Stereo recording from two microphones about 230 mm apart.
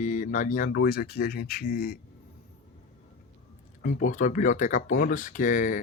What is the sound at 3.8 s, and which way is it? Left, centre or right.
Speech, left.